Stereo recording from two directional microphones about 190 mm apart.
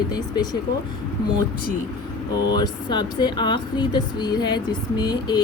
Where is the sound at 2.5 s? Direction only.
25° left (ahead or behind).